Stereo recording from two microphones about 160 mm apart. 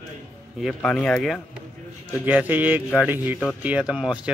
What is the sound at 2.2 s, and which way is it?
Speech, 10° right (ahead or behind).